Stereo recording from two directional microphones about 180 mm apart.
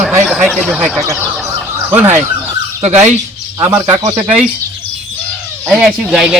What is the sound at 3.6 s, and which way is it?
Speech, 15° right (ahead or behind).